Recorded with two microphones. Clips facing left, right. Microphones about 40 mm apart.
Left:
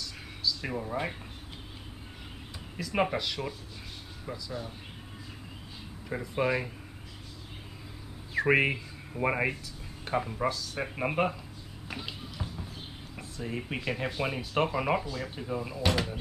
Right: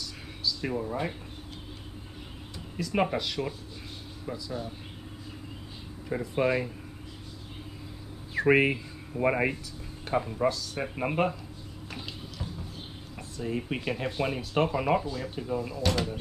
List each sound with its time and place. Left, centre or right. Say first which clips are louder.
0.0 s a sound: even; centre
2.8 s speech: right 1 dB; centre
6.0 s speech: right 2 dB; centre
8.4 s speech: right 2 dB; centre
11.9 s a sound: left 2 dB; centre
13.1 s speech: right 4 dB; centre